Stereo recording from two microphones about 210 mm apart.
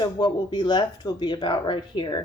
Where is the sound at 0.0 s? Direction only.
20° left (ahead or behind).